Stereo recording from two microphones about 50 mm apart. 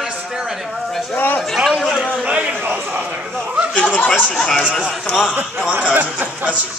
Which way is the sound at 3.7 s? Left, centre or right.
Left.